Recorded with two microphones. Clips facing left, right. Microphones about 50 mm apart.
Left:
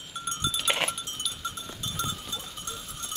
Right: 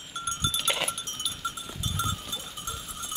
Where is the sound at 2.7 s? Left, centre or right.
Centre.